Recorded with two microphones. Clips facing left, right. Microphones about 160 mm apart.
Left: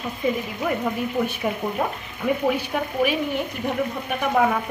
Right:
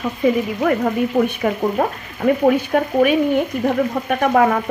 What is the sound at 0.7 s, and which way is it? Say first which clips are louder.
Speech: right 5 dB; 65° right (ahead or behind).